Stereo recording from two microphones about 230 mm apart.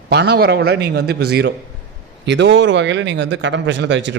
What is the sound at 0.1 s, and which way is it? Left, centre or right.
Speech, right.